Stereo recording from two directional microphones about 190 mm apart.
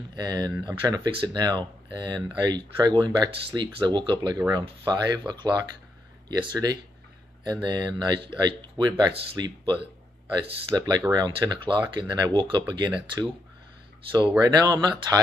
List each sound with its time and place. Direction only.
0.1 s speech: 20° right (ahead or behind)
14.4 s speech: 20° right (ahead or behind)